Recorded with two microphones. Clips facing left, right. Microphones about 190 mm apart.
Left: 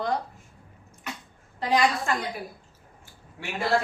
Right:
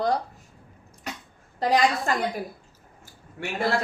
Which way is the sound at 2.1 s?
40° right (ahead or behind).